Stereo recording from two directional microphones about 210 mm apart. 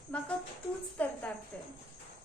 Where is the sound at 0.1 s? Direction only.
5° left (ahead or behind).